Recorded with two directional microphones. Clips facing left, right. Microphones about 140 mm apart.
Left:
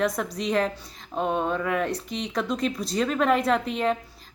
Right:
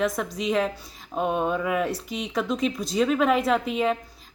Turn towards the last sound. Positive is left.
turn(degrees=0)  # may be behind; listen again after turning